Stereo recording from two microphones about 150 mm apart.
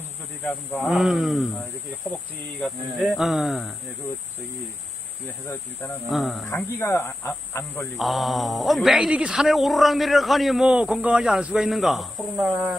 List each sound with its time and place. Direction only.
0.7 s speech: centre (ahead or behind)
2.6 s speech: centre (ahead or behind)
6.1 s speech: centre (ahead or behind)
6.7 s speech: 15° left (ahead or behind)
7.9 s speech: centre (ahead or behind)
12.5 s speech: 10° right (ahead or behind)